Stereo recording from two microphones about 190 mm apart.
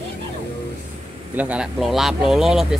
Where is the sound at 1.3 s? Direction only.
5° right (ahead or behind).